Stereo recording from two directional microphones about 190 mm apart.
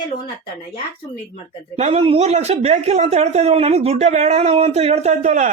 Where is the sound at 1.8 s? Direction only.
30° right (ahead or behind).